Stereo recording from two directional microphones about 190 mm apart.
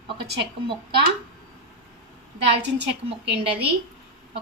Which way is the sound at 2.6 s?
65° right (ahead or behind).